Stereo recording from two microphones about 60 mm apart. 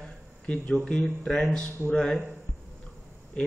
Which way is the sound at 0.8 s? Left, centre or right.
Centre.